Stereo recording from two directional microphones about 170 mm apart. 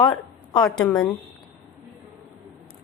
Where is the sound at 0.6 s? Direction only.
5° left (ahead or behind).